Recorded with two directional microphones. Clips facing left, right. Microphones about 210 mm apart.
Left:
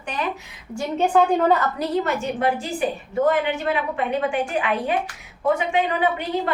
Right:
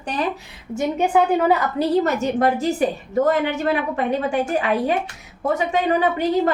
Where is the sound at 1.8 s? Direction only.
35° right (ahead or behind).